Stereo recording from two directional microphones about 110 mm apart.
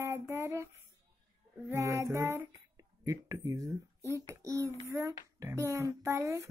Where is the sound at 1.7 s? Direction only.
25° right (ahead or behind).